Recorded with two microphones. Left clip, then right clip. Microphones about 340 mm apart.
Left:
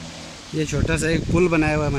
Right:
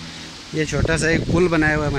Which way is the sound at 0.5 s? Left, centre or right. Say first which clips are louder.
Right 3 dB; centre.